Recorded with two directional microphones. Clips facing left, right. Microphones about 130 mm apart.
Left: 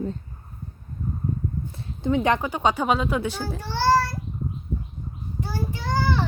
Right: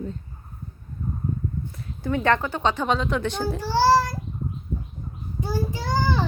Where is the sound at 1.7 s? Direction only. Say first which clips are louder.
Left 4 dB; 25° left (ahead or behind); by 3.6 s 5° left (ahead or behind).